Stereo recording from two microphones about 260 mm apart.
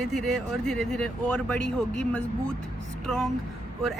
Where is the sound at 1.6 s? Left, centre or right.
Right.